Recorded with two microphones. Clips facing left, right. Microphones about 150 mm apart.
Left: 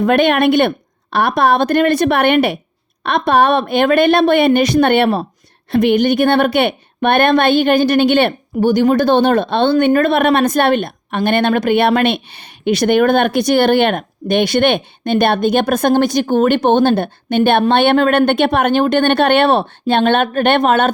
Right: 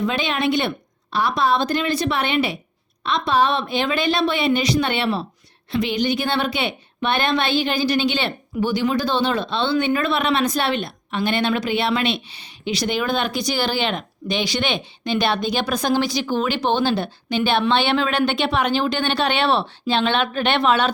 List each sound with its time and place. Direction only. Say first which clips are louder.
0.0 s a woman's voice: left 10 dB; 55° left (ahead or behind)